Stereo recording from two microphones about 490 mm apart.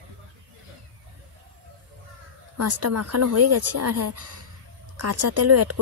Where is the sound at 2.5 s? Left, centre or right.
Right.